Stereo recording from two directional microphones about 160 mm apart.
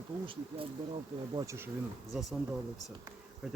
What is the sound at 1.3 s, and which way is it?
Speech, 15° right (ahead or behind).